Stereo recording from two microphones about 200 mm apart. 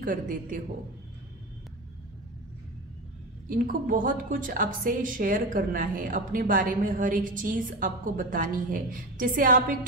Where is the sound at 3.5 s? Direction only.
40° right (ahead or behind).